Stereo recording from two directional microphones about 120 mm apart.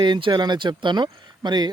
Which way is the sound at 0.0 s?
40° right (ahead or behind).